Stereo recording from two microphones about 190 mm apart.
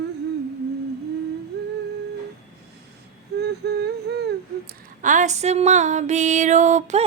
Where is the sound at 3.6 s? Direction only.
65° right (ahead or behind).